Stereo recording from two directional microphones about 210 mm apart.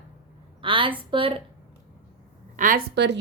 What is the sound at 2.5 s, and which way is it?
Speech, 40° right (ahead or behind).